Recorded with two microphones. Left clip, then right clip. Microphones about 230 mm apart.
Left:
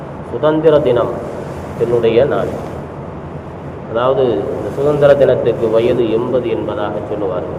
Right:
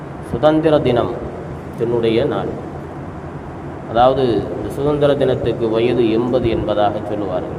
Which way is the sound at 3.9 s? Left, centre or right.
Right.